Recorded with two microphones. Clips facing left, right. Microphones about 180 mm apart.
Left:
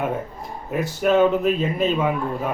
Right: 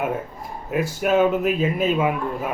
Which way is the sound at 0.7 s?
5° right (ahead or behind).